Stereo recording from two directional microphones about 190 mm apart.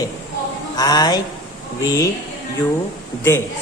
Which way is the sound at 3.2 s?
10° left (ahead or behind).